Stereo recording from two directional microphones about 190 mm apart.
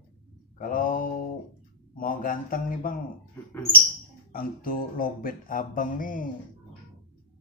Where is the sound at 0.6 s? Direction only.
45° left (ahead or behind).